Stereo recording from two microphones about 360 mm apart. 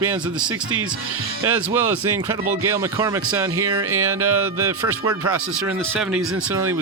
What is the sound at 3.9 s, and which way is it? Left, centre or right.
Music, right.